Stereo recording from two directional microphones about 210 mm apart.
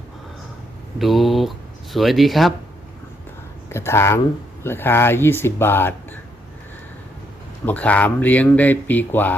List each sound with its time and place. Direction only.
0.9 s speech: centre (ahead or behind)
3.7 s speech: 10° left (ahead or behind)
7.6 s speech: 5° left (ahead or behind)